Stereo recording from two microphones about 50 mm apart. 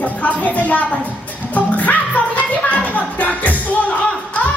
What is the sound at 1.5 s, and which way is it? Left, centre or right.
Music, left.